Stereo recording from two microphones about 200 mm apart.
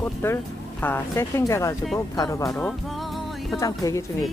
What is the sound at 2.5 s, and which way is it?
Music, 5° left (ahead or behind).